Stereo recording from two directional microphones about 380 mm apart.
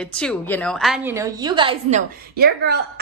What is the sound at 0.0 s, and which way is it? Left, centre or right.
A woman's voice, centre.